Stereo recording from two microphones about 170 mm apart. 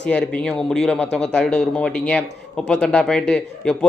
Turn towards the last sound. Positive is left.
turn(degrees=5)  # may be behind; listen again after turning